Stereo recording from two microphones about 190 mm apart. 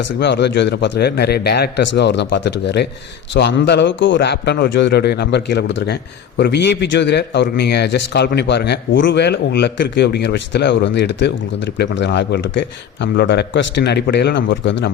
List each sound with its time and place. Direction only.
0.2 s a man's voice: 65° left (ahead or behind)